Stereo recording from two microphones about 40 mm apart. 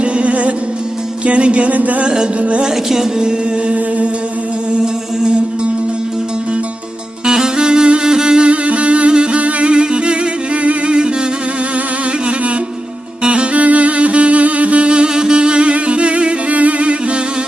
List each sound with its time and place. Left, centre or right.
0.0 s music: right
2.0 s music: centre
2.4 s music: right
2.6 s music: centre
3.7 s music: right
7.3 s music: centre
13.2 s music: right